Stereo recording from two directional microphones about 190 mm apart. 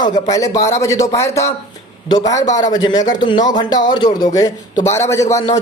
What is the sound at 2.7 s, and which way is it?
Speech, 20° left (ahead or behind).